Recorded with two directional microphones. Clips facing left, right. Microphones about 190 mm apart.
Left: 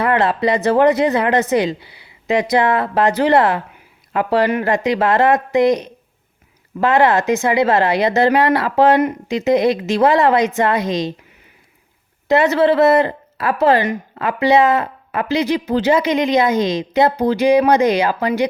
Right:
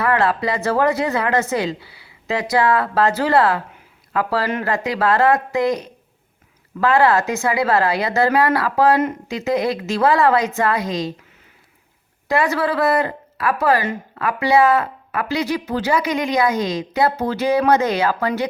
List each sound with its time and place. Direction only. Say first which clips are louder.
0.0 s a woman's voice: left 3 dB; 20° left (ahead or behind)
12.3 s a woman's voice: left 6 dB; 25° left (ahead or behind)